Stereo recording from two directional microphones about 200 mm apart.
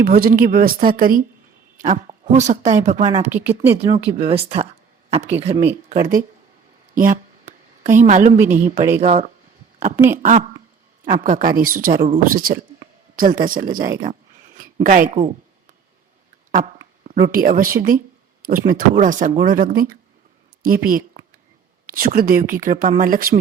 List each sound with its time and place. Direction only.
0.0 s a woman's voice: 50° right (ahead or behind)
3.2 s speech: 10° right (ahead or behind)
3.8 s speech: 25° right (ahead or behind)
5.9 s a woman's voice: 40° right (ahead or behind)
11.0 s speech: 40° right (ahead or behind)
16.5 s speech: 45° right (ahead or behind)